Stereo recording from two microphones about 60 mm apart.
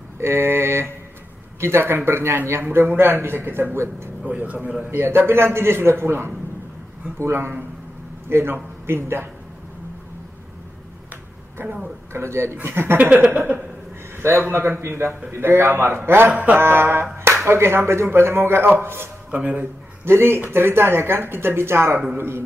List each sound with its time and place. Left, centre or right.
0.2 s a man's voice: right
4.3 s a sound: right
4.9 s a man's voice: right
11.6 s a woman's voice: centre
12.1 s a man's voice: right
13.0 s a sound: right
14.5 s a man's voice: right
16.3 s a man's voice: right
19.3 s a sound: right
20.1 s a man's voice: right